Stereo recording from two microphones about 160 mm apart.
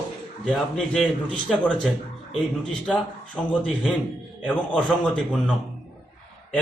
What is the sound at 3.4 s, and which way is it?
Speech, centre (ahead or behind).